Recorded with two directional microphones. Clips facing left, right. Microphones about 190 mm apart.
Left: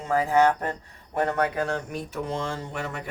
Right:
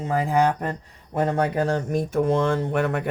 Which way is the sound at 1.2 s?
25° right (ahead or behind).